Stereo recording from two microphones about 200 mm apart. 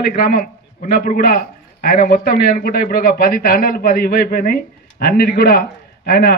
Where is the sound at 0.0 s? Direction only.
50° left (ahead or behind).